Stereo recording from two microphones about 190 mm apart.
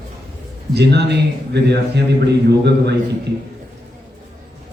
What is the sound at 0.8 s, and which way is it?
A man's voice, 60° right (ahead or behind).